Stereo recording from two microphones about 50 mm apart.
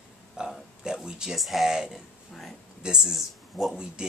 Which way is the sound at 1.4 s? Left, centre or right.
Centre.